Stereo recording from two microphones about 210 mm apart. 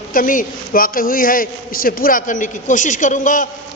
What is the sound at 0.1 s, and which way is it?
A man's voice, 40° left (ahead or behind).